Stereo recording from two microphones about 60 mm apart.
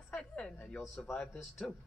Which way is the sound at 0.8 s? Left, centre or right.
Centre.